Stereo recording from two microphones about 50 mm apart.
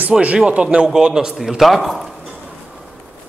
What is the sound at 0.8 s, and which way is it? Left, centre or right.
A man's voice, centre.